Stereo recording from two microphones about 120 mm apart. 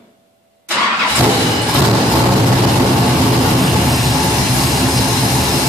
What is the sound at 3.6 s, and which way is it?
Vehicle, centre (ahead or behind).